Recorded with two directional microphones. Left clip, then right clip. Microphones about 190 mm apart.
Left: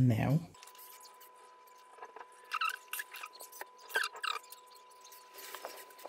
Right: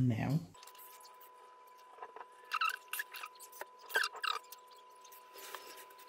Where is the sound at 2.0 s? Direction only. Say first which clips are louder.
Even; centre (ahead or behind).